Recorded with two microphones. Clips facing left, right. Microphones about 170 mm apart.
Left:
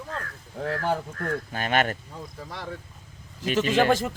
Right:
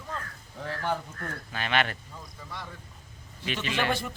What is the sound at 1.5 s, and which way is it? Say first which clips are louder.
Speech: left 2 dB; 45° left (ahead or behind).